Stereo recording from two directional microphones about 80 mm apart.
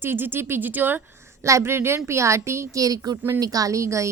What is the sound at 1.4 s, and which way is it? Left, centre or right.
A woman's voice, right.